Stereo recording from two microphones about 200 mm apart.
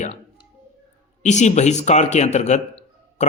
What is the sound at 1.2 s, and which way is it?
A man's voice, 35° left (ahead or behind).